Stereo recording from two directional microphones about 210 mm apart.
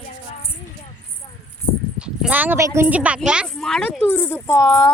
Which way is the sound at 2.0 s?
5° right (ahead or behind).